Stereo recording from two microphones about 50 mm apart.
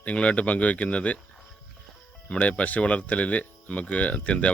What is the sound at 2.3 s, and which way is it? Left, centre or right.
Speech, left.